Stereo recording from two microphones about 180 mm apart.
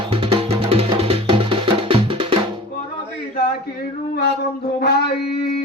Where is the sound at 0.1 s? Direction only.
30° right (ahead or behind).